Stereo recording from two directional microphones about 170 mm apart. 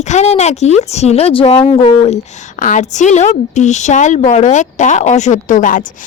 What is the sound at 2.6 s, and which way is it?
A woman's voice, 50° left (ahead or behind).